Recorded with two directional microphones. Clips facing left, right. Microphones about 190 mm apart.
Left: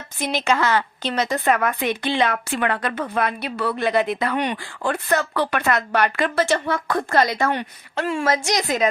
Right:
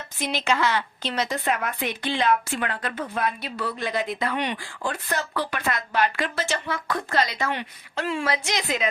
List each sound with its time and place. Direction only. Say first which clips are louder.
0.2 s a woman's voice: left 3 dB; 45° left (ahead or behind)
1.5 s a woman's voice: left 6 dB; 75° left (ahead or behind); by 8.9 s 45° left (ahead or behind)